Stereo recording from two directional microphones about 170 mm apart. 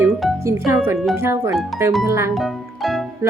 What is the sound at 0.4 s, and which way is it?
Speech, 15° right (ahead or behind).